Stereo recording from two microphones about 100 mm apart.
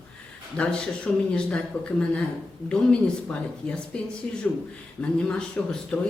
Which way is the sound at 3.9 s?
10° left (ahead or behind).